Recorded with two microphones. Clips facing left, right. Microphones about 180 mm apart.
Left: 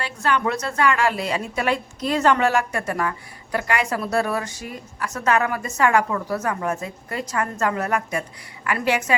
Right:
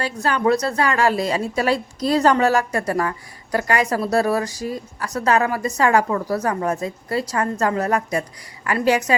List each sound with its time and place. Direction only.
0.0 s a woman's voice: 35° right (ahead or behind)